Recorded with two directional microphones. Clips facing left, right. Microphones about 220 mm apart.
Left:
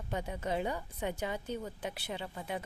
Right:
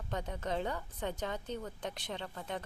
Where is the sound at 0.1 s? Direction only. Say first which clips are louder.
Left 2 dB; 10° left (ahead or behind).